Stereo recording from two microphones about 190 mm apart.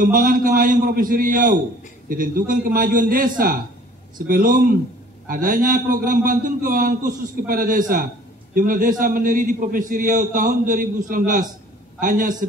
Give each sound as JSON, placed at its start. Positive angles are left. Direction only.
{"t": 0.0, "sound": "a man's voice", "side_deg": -45}